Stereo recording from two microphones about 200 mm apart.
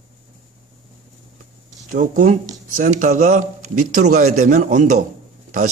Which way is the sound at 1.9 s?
40° right (ahead or behind).